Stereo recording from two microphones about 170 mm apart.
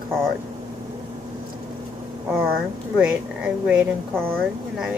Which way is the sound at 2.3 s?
5° right (ahead or behind).